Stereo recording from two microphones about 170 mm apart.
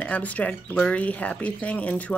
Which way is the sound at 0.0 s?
10° left (ahead or behind).